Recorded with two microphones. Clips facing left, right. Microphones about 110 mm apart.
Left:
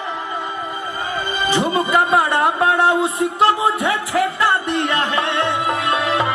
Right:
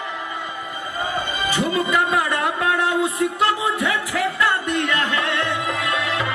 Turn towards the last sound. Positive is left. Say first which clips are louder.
# left 5 dB
turn(degrees=35)  # may be behind; listen again after turning